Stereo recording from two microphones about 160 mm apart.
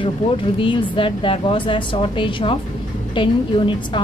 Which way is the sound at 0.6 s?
30° left (ahead or behind).